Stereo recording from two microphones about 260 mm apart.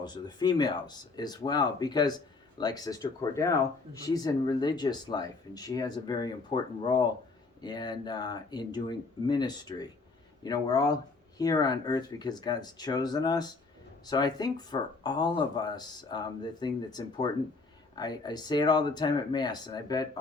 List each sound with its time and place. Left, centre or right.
0.0 s speech: centre